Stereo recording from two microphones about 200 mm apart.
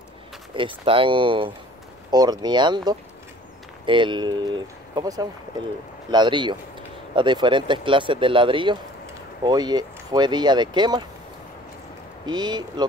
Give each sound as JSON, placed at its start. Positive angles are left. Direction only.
{"t": 0.6, "sound": "speech", "side_deg": -25}
{"t": 12.3, "sound": "speech", "side_deg": -20}